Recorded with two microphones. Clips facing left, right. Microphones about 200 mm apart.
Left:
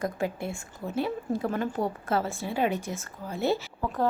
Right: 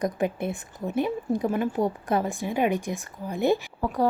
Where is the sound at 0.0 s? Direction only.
20° right (ahead or behind).